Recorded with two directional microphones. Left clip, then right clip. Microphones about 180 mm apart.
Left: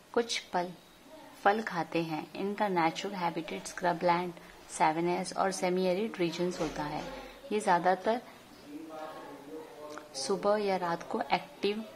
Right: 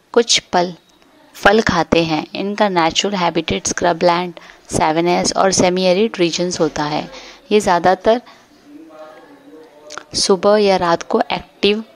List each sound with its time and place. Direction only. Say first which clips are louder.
0.1 s speech: right 17 dB; 45° right (ahead or behind)
9.8 s speech: right 19 dB; 45° right (ahead or behind)